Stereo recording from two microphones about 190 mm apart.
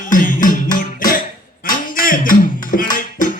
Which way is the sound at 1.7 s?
45° left (ahead or behind).